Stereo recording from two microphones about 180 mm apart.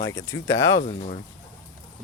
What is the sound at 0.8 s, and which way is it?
Speech, 45° left (ahead or behind).